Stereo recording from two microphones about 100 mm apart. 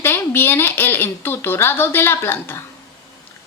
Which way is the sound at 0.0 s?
25° left (ahead or behind).